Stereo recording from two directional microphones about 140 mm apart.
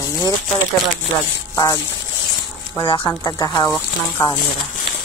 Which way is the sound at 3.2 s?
30° left (ahead or behind).